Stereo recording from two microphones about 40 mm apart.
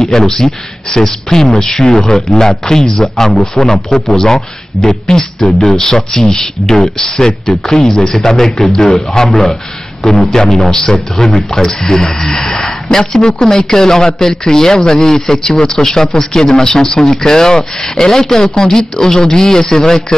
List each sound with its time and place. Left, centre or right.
0.0 s a man's voice: centre